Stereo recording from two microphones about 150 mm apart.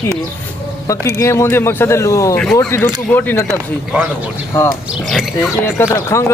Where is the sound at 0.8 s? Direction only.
20° left (ahead or behind).